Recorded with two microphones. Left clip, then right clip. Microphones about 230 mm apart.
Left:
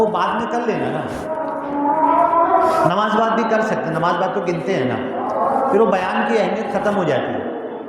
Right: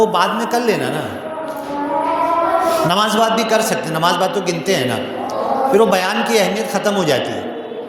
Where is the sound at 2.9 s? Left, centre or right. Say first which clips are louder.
Right 2 dB; right.